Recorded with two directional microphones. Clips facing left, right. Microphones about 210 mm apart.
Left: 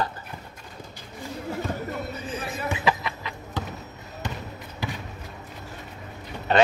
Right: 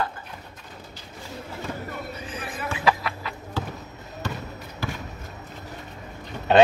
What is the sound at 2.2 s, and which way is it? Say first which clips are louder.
Basketball bounce: left 2 dB; 25° left (ahead or behind).